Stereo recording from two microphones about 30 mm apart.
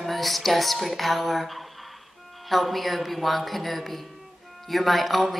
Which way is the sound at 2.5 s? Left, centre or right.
Centre.